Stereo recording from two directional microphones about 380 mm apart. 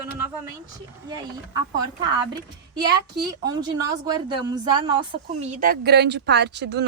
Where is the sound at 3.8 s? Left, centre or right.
Centre.